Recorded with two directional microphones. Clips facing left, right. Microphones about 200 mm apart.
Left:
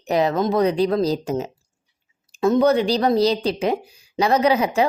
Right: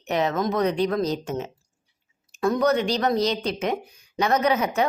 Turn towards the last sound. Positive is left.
turn(degrees=30)  # may be behind; listen again after turning